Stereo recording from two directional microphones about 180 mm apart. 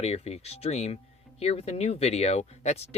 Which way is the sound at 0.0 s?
35° left (ahead or behind).